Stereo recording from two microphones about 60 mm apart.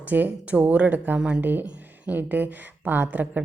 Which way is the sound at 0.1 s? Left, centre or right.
Right.